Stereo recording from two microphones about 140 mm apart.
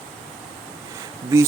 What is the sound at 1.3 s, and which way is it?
Speech, 20° right (ahead or behind).